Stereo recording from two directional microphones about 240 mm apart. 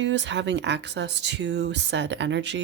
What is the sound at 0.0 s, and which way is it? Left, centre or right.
Speech, right.